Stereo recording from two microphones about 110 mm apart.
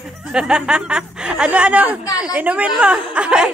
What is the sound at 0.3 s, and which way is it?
Speech, 5° right (ahead or behind).